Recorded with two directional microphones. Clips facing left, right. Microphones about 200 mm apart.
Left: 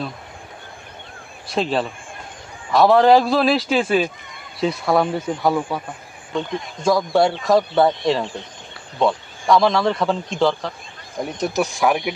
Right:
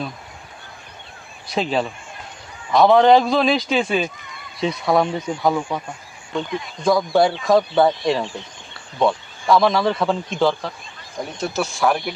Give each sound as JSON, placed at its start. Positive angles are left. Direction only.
{"t": 1.5, "sound": "speech", "side_deg": 0}
{"t": 6.8, "sound": "speech", "side_deg": 0}
{"t": 11.3, "sound": "speech", "side_deg": 15}